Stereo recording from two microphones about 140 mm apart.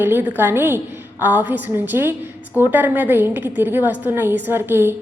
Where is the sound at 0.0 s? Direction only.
15° right (ahead or behind).